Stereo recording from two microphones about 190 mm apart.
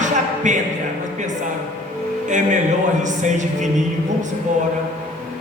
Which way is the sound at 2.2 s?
40° right (ahead or behind).